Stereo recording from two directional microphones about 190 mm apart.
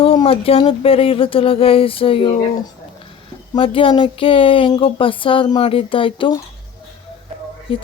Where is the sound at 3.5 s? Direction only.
25° left (ahead or behind).